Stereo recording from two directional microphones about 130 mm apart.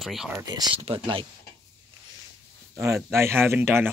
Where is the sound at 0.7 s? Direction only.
45° right (ahead or behind).